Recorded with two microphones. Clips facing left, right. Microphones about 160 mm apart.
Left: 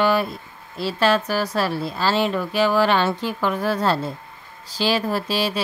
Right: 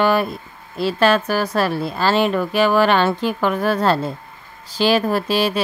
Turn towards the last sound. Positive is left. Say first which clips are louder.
# right 4 dB
turn(degrees=-55)  # may be behind; listen again after turning